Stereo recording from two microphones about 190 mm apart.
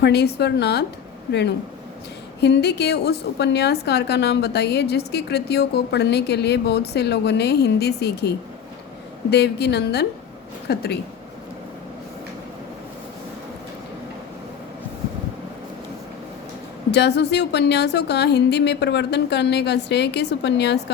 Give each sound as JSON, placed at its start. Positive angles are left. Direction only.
{"t": 0.0, "sound": "a woman's voice", "side_deg": 60}
{"t": 9.3, "sound": "a woman's voice", "side_deg": 60}
{"t": 16.9, "sound": "a woman's voice", "side_deg": 60}